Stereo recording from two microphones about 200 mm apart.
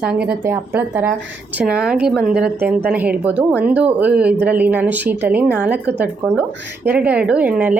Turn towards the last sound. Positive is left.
turn(degrees=-5)  # may be behind; listen again after turning